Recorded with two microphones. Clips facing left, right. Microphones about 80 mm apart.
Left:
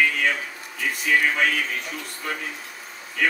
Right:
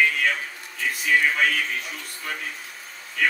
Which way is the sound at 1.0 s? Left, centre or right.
Centre.